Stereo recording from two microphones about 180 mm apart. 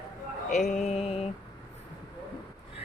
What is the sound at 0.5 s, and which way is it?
Speech, 40° left (ahead or behind).